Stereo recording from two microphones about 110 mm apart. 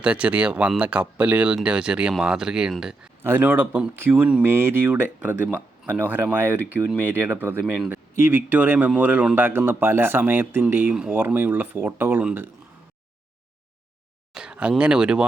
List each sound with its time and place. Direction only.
0.0 s speech: 10° right (ahead or behind)
3.2 s speech: 15° right (ahead or behind)
4.4 s speech: 20° right (ahead or behind)
14.3 s speech: 10° right (ahead or behind)